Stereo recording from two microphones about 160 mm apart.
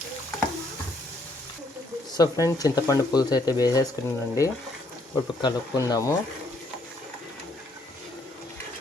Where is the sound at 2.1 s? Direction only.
20° left (ahead or behind).